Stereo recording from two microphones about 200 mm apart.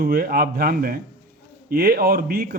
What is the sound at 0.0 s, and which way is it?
Speech, 50° right (ahead or behind).